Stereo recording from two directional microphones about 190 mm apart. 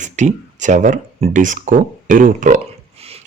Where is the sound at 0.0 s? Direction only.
40° right (ahead or behind).